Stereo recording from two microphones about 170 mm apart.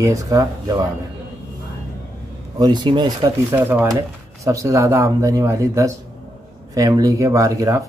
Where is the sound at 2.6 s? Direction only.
25° right (ahead or behind).